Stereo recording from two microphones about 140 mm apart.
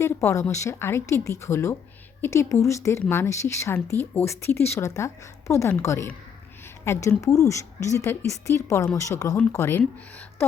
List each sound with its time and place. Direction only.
0.0 s a woman's voice: 20° left (ahead or behind)